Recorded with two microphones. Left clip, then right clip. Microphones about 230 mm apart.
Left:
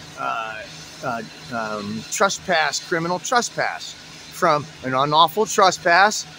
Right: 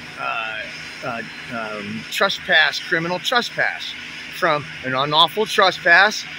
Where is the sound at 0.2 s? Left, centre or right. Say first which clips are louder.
Right 1 dB; centre.